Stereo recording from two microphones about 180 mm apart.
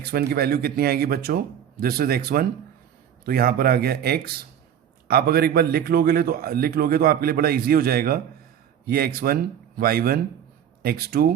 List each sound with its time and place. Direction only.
0.0 s a man's voice: 60° right (ahead or behind)